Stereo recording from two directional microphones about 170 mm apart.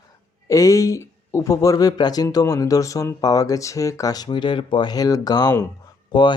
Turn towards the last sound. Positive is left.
turn(degrees=25)  # may be behind; listen again after turning